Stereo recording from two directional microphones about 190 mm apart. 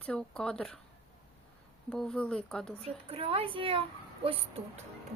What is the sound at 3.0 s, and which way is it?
Speech, 30° right (ahead or behind).